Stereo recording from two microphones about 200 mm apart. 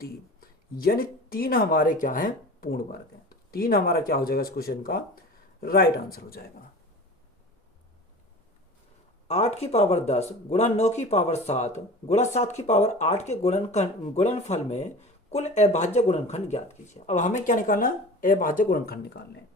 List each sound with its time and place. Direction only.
0.0 s speech: 45° left (ahead or behind)
9.2 s speech: 30° left (ahead or behind); by 19.4 s 55° left (ahead or behind)